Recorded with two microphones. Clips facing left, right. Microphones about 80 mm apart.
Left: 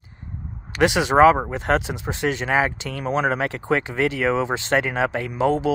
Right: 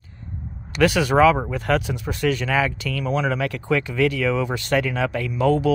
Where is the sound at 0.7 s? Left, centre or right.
Left.